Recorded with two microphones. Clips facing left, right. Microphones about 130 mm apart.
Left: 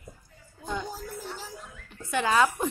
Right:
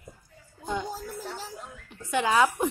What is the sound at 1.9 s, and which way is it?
Speech, 15° right (ahead or behind).